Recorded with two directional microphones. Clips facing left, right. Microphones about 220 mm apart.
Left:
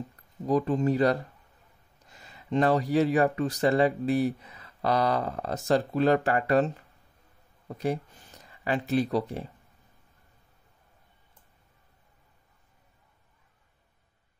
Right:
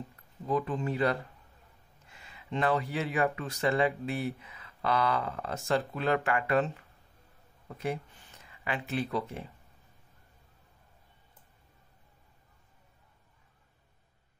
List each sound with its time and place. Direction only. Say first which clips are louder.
0.5 s speech: left 6 dB; 35° left (ahead or behind)